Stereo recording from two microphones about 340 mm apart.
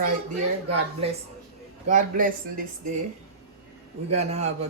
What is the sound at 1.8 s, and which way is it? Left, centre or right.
Speech, right.